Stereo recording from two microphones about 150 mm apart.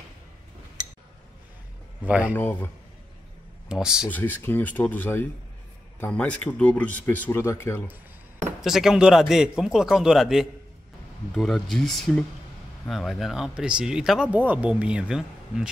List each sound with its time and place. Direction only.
2.0 s speech: 10° right (ahead or behind)
2.3 s speech: 15° left (ahead or behind)
3.6 s speech: 5° right (ahead or behind)
4.1 s speech: 10° left (ahead or behind)
8.5 s speech: 5° right (ahead or behind)